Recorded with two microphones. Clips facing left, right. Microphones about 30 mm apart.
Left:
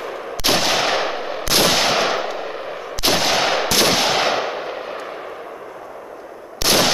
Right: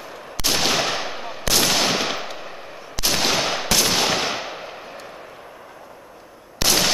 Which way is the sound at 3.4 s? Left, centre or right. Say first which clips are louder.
Left 4 dB; left.